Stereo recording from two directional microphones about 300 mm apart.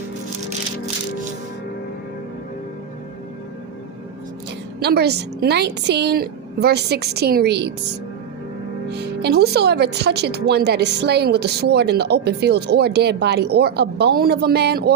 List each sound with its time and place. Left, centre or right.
4.8 s speech: right
8.9 s speech: right